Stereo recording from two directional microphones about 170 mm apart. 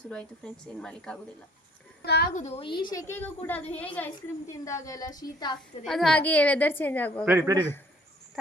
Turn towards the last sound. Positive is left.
turn(degrees=-15)  # may be behind; listen again after turning